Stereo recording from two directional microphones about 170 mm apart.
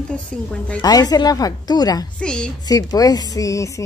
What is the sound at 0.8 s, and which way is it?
A woman's voice, 20° left (ahead or behind).